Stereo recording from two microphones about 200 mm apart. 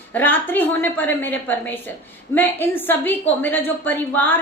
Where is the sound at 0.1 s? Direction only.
10° left (ahead or behind).